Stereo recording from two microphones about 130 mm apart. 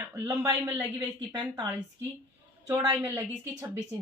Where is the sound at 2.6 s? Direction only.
25° right (ahead or behind).